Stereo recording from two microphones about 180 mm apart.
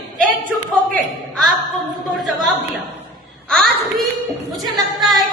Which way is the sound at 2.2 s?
Centre (ahead or behind).